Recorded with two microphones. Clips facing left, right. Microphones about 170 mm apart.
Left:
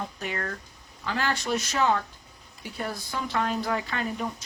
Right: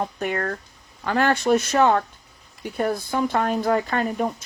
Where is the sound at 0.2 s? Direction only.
55° right (ahead or behind).